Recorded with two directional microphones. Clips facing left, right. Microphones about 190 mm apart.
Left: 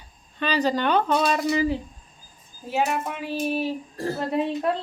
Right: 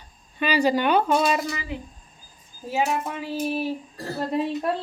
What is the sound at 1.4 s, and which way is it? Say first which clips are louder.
Speech: left 9 dB; 30° left (ahead or behind).